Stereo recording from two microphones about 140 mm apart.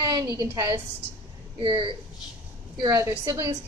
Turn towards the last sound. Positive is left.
turn(degrees=-20)  # may be behind; listen again after turning